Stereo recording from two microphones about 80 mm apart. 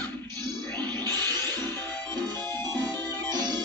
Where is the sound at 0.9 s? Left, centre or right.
Right.